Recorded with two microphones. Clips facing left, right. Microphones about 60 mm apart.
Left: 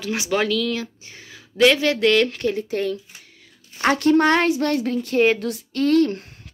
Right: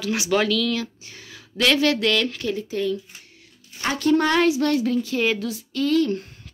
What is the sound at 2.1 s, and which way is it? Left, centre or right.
Speech, left.